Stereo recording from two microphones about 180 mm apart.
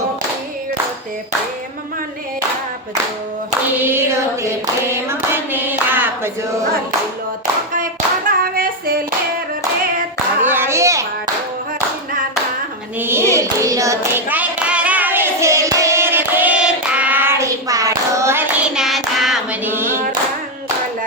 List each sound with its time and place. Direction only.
3.8 s hands: 10° right (ahead or behind)
8.3 s clapping: 55° right (ahead or behind)
10.4 s a sound: 10° right (ahead or behind)
13.0 s clapping: 15° right (ahead or behind)
18.7 s child singing: centre (ahead or behind)